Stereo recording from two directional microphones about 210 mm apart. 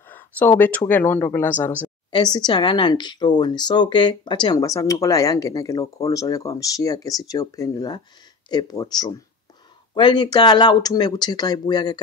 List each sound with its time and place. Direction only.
0.1 s speech: 10° left (ahead or behind)
2.0 s speech: 20° left (ahead or behind)